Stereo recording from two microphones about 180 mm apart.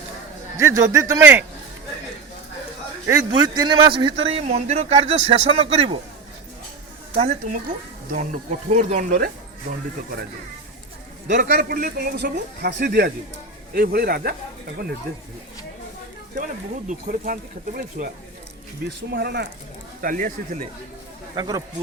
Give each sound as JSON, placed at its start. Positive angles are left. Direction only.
{"t": 0.5, "sound": "a man's voice", "side_deg": -15}
{"t": 3.1, "sound": "a man's voice", "side_deg": -20}
{"t": 7.2, "sound": "speech", "side_deg": -40}
{"t": 11.3, "sound": "speech", "side_deg": -60}
{"t": 16.9, "sound": "speech", "side_deg": -50}
{"t": 19.1, "sound": "speech", "side_deg": -60}
{"t": 20.0, "sound": "speech", "side_deg": -50}
{"t": 21.3, "sound": "speech", "side_deg": -20}